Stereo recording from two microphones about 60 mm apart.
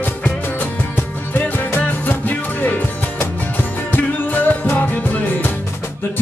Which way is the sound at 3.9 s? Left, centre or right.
Left.